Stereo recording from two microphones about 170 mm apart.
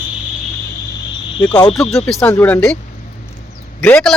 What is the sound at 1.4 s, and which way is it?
Speech, 25° left (ahead or behind).